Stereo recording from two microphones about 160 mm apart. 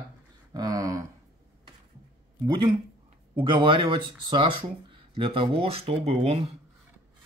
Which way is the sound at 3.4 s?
30° right (ahead or behind).